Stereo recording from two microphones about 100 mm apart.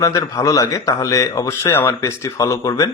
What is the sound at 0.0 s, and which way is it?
Speech, 35° left (ahead or behind).